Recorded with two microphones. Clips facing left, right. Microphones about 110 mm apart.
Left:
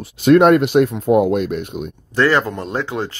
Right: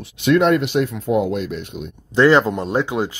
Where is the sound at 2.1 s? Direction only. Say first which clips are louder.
Right 3 dB; 20° right (ahead or behind).